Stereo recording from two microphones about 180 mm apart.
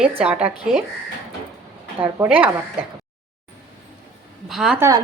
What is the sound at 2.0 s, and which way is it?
Speech, 15° right (ahead or behind).